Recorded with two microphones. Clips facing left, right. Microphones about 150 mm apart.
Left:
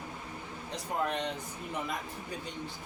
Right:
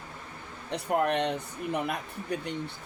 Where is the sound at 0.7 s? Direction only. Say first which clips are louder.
Right 7 dB; 65° right (ahead or behind).